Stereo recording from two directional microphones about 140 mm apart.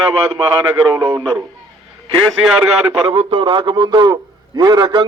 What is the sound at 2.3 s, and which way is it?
Speech, 5° right (ahead or behind).